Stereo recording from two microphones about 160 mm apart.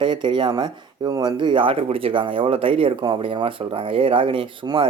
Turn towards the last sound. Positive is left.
turn(degrees=-30)  # may be behind; listen again after turning